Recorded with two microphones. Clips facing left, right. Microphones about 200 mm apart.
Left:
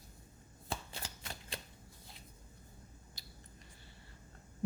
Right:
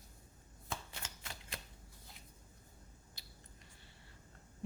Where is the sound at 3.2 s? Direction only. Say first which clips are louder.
Left 3 dB; 40° left (ahead or behind).